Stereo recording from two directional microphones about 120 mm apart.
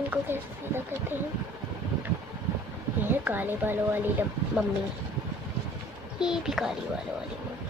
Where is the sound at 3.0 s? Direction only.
15° right (ahead or behind).